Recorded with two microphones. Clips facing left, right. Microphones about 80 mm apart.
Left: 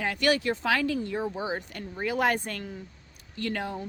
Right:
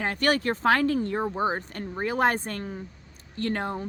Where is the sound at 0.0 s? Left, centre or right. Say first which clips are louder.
Right 1 dB; right.